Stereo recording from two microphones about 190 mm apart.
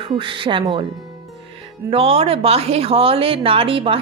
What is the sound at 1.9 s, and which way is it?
Speech, 30° right (ahead or behind).